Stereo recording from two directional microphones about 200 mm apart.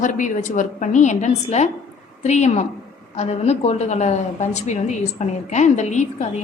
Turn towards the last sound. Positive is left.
turn(degrees=35)  # may be behind; listen again after turning